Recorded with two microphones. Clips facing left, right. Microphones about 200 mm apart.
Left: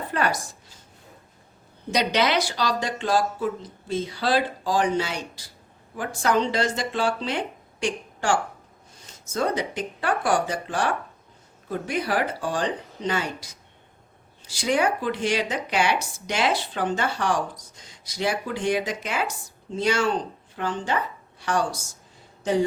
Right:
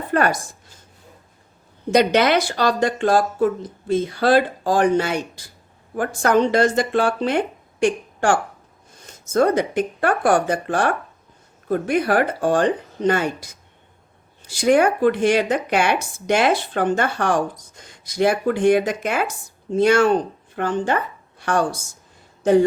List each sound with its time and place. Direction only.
0.1 s a woman's voice: 55° right (ahead or behind)
1.9 s speech: 50° right (ahead or behind)